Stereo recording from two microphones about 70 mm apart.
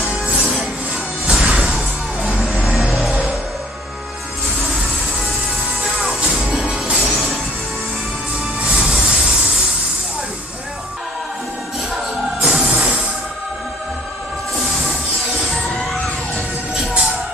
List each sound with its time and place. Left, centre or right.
0.0 s music: centre
5.9 s music: centre
8.5 s music: centre
11.9 s music: centre
12.7 s music: centre
15.5 s music: centre